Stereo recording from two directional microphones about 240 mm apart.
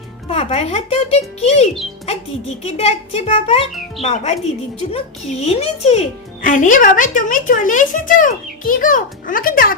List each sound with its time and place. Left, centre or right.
0.3 s a child's voice: left